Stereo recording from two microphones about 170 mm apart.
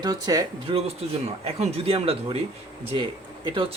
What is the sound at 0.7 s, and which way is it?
Speech, 35° right (ahead or behind).